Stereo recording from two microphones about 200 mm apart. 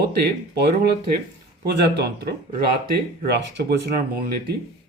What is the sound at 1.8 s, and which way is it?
Speech, 55° right (ahead or behind).